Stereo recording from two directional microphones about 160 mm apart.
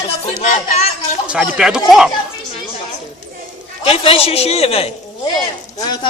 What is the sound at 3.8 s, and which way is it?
Speech, 35° left (ahead or behind).